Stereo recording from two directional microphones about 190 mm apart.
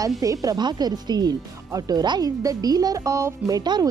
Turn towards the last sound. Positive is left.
turn(degrees=-20)  # may be behind; listen again after turning